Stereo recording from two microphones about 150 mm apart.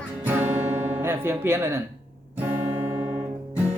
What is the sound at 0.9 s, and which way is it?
Speech, 15° right (ahead or behind).